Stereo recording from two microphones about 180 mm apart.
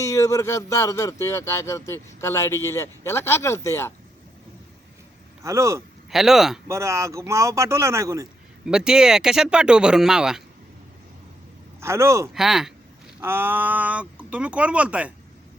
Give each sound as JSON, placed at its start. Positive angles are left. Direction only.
{"t": 0.0, "sound": "speech", "side_deg": 15}
{"t": 5.4, "sound": "speech", "side_deg": -15}
{"t": 6.1, "sound": "speech", "side_deg": 0}
{"t": 6.7, "sound": "speech", "side_deg": -15}
{"t": 8.6, "sound": "speech", "side_deg": -5}
{"t": 11.8, "sound": "speech", "side_deg": -15}
{"t": 12.3, "sound": "speech", "side_deg": -5}